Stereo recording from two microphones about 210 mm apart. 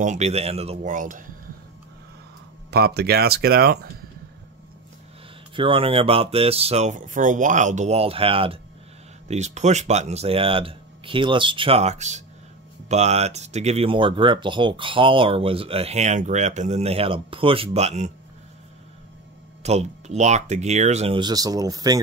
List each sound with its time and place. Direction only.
0.0 s speech: 35° right (ahead or behind)
2.7 s speech: 50° right (ahead or behind)
5.6 s speech: 25° right (ahead or behind)
19.6 s speech: 30° right (ahead or behind)